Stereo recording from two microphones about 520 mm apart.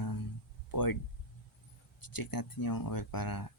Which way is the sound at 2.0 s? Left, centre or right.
Left.